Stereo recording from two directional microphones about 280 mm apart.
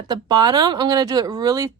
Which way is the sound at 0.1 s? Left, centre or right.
Centre.